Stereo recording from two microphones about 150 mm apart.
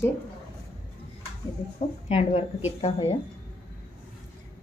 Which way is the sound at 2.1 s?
45° left (ahead or behind).